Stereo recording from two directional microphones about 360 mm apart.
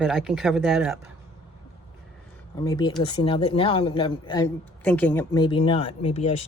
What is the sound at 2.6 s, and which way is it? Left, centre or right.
Speech, centre.